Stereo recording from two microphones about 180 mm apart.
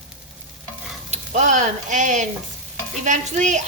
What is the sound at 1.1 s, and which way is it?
A woman's voice, 45° right (ahead or behind).